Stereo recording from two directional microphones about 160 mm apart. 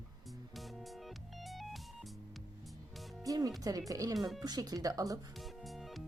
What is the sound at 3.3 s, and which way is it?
A woman's voice, 20° right (ahead or behind).